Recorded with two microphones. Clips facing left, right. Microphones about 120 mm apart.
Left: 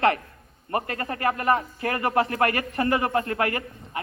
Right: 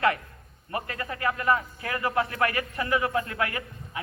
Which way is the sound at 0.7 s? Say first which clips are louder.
Left 5 dB; 50° left (ahead or behind).